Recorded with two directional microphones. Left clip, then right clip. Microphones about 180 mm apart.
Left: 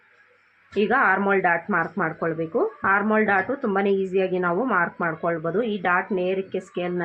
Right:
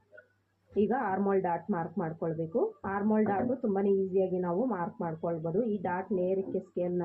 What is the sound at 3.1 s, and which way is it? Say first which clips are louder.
A woman's voice: left 9 dB; 35° left (ahead or behind).